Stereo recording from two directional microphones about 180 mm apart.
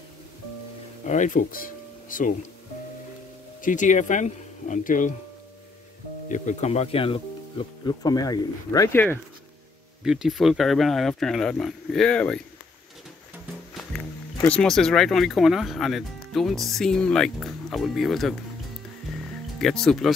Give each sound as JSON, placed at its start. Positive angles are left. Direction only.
{"t": 1.0, "sound": "speech", "side_deg": 45}
{"t": 3.6, "sound": "speech", "side_deg": 45}
{"t": 6.2, "sound": "speech", "side_deg": 45}
{"t": 10.0, "sound": "speech", "side_deg": 0}
{"t": 14.4, "sound": "speech", "side_deg": 5}
{"t": 19.6, "sound": "speech", "side_deg": 5}